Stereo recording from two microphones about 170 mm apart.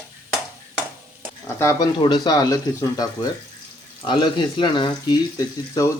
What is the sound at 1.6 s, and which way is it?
Speech, 15° left (ahead or behind).